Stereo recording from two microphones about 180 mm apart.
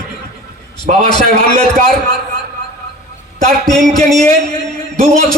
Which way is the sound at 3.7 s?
Centre (ahead or behind).